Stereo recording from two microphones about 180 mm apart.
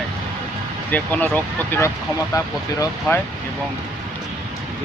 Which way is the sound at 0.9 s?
10° left (ahead or behind).